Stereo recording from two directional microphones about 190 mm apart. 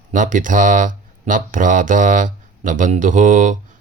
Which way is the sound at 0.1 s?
45° right (ahead or behind).